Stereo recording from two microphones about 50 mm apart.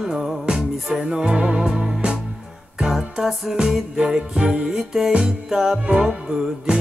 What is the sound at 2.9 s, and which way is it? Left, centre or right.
Music, centre.